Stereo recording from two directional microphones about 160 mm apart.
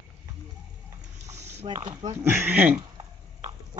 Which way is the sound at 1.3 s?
45° right (ahead or behind).